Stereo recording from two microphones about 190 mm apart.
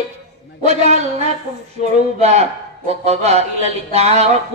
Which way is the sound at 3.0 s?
35° right (ahead or behind).